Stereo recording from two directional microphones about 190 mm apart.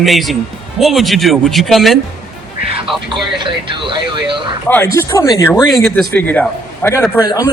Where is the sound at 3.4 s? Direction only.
25° right (ahead or behind).